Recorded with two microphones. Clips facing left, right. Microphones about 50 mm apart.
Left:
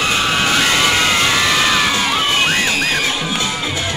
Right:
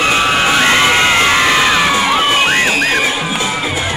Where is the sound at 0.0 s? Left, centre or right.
Right.